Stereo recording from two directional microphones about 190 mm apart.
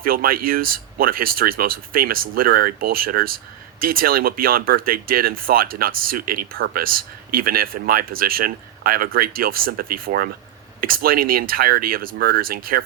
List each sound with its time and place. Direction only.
0.0 s speech: 50° right (ahead or behind)